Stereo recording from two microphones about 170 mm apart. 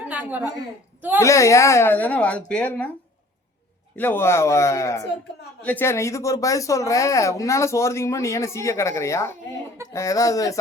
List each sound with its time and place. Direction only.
0.1 s a sound: 10° right (ahead or behind)
1.2 s speech: 15° left (ahead or behind)
3.9 s speech: 10° left (ahead or behind)